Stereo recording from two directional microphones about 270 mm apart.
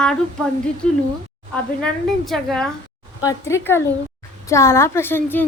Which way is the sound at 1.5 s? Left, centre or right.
Centre.